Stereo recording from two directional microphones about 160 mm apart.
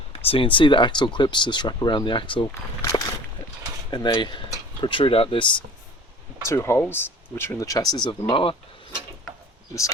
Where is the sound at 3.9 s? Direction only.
25° left (ahead or behind).